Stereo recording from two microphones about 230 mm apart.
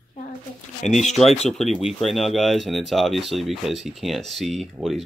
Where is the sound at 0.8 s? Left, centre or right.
Left.